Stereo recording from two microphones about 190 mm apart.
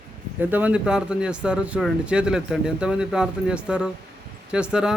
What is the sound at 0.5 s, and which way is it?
Speech, 5° right (ahead or behind).